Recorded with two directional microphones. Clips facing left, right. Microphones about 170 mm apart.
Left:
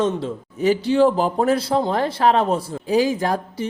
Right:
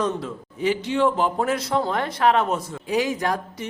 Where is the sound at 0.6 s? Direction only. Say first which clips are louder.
Left 5 dB; 35° left (ahead or behind).